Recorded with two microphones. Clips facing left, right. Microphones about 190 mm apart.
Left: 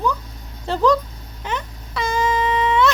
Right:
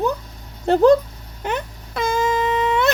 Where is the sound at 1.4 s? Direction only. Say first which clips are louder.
Right 3 dB; 50° right (ahead or behind).